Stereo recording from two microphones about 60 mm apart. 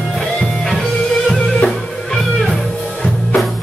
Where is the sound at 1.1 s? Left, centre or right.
Centre.